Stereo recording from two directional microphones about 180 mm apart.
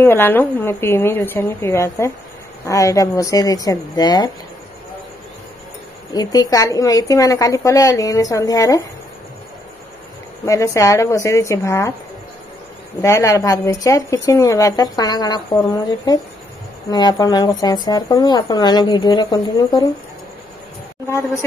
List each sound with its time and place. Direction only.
0.0 s a woman's voice: 10° left (ahead or behind)
6.1 s a woman's voice: 20° left (ahead or behind)
10.4 s a woman's voice: 15° left (ahead or behind)
13.0 s a woman's voice: 15° left (ahead or behind)
16.9 s a woman's voice: 20° left (ahead or behind)